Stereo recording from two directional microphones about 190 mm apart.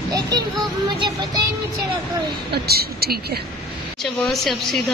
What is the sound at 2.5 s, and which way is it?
Speech, 55° right (ahead or behind).